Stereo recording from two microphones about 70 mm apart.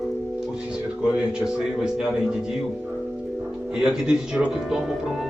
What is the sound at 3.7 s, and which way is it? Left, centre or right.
A man's voice, centre.